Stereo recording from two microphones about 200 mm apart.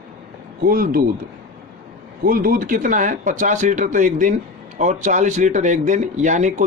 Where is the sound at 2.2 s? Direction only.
45° right (ahead or behind).